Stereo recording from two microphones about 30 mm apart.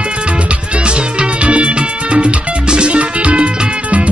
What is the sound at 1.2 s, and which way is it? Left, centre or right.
Music, right.